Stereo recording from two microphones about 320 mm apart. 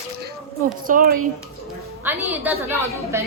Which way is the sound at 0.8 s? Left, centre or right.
Right.